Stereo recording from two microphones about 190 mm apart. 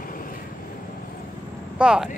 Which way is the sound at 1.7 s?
5° right (ahead or behind).